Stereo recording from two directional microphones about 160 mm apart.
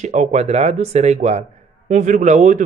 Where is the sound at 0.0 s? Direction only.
45° right (ahead or behind).